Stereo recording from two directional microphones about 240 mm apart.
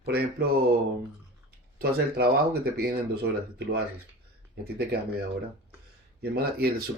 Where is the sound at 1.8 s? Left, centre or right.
Right.